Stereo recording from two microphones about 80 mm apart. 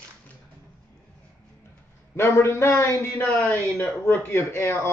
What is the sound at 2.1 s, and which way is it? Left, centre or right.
A man's voice, left.